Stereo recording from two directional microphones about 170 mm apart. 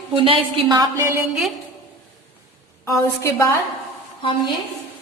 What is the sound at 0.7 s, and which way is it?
Speech, 20° right (ahead or behind).